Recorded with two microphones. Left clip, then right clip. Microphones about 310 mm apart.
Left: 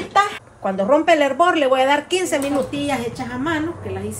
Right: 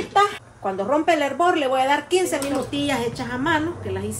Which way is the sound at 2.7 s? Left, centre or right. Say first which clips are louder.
Left 1 dB; centre.